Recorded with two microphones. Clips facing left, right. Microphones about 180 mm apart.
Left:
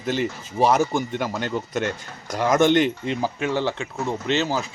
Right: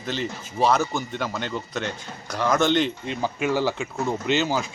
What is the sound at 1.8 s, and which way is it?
Speech, 50° left (ahead or behind).